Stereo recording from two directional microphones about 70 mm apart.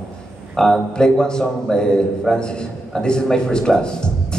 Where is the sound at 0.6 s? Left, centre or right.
Centre.